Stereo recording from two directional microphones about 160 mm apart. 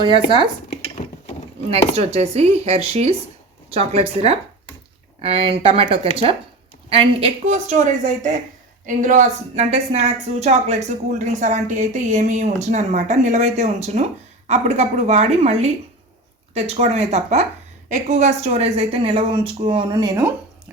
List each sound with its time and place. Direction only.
1.0 s mechanisms: 55° left (ahead or behind)
2.0 s a woman's voice: 40° right (ahead or behind); by 20.2 s 25° right (ahead or behind)